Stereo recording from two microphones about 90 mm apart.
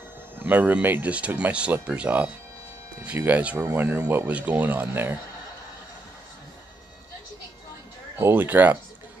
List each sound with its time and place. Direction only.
0.4 s speech: 20° right (ahead or behind)
8.2 s speech: 25° right (ahead or behind)